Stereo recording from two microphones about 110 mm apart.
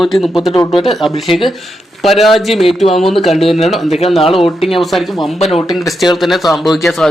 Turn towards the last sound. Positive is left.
turn(degrees=0)  # may be behind; listen again after turning